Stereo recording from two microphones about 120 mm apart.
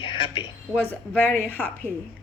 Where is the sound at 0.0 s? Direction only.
50° left (ahead or behind).